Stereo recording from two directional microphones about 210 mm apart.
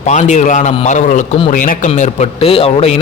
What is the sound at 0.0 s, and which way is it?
A man's voice, 35° left (ahead or behind).